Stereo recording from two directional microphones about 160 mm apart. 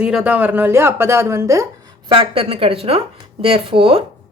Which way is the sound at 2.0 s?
35° right (ahead or behind).